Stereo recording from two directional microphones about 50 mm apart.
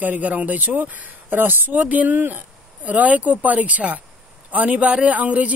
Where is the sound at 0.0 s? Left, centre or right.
Right.